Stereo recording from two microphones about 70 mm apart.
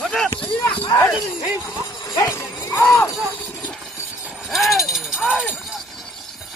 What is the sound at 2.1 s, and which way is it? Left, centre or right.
Clip-clop, left.